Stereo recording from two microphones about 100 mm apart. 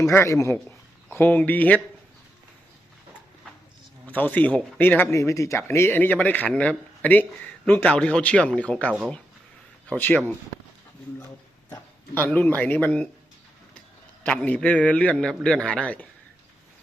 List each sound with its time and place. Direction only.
0.1 s speech: 30° left (ahead or behind)
1.1 s a man's voice: 15° left (ahead or behind)
4.0 s a man's voice: 15° left (ahead or behind)
5.1 s a man's voice: 30° left (ahead or behind)
11.7 s a man's voice: 20° left (ahead or behind)
14.3 s a man's voice: 10° left (ahead or behind)